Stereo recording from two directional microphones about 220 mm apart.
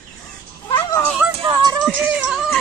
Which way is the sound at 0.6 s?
20° left (ahead or behind).